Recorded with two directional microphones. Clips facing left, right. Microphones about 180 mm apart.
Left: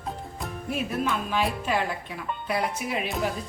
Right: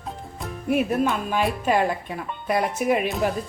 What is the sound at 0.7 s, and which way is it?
Speech, 55° right (ahead or behind).